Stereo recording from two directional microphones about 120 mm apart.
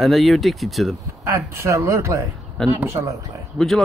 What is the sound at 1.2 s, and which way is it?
Speech, 25° right (ahead or behind).